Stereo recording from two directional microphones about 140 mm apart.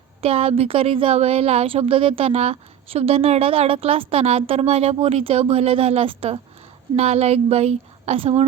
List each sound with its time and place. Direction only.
0.2 s speech: 45° right (ahead or behind)